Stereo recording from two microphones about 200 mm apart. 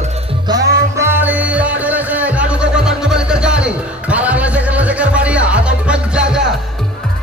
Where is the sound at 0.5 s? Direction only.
20° right (ahead or behind); by 6.4 s 5° right (ahead or behind).